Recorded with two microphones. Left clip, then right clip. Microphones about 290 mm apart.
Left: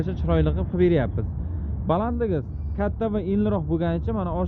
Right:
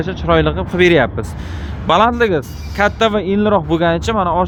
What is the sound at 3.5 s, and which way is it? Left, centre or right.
Speech, right.